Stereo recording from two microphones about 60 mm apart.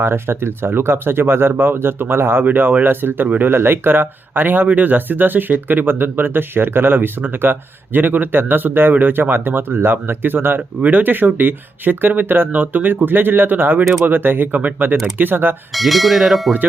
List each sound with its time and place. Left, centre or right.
0.0 s speech: right
15.7 s speech: centre